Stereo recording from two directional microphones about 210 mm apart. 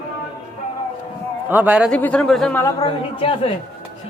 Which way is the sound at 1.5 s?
5° right (ahead or behind).